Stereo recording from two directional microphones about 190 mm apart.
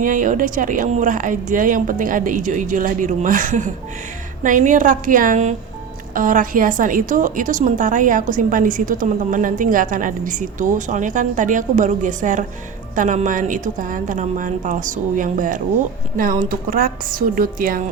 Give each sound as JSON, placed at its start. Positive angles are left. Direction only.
{"t": 0.0, "sound": "a woman's voice", "side_deg": -45}